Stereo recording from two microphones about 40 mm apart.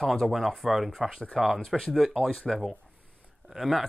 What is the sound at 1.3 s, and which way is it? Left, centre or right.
Speech, centre.